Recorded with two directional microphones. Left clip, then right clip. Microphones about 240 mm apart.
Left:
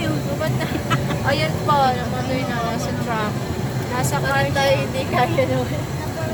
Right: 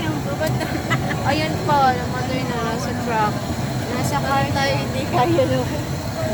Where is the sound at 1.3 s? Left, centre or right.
Centre.